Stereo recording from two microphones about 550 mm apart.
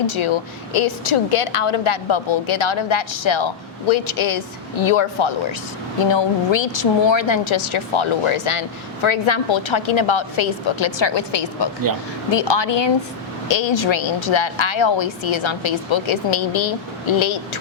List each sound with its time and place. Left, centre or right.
0.1 s a woman's voice: left